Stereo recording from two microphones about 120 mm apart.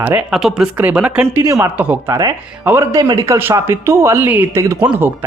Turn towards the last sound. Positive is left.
turn(degrees=-15)  # may be behind; listen again after turning